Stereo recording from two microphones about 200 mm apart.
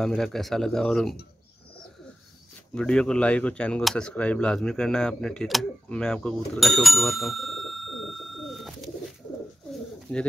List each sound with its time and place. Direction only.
0.0 s speech: centre (ahead or behind)
2.7 s speech: 5° left (ahead or behind)
10.1 s pigeon: 10° left (ahead or behind)